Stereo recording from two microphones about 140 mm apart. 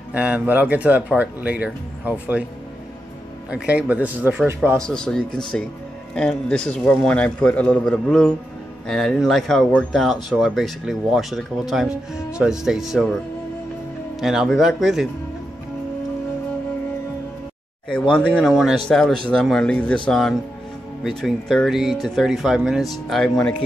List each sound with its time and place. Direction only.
0.1 s speech: 10° right (ahead or behind)
3.4 s speech: 10° right (ahead or behind)
4.7 s a man's voice: 5° left (ahead or behind)
14.2 s speech: 5° right (ahead or behind)
18.1 s speech: 5° left (ahead or behind)